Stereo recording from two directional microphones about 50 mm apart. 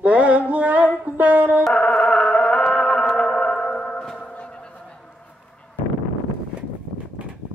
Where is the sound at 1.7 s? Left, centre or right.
Centre.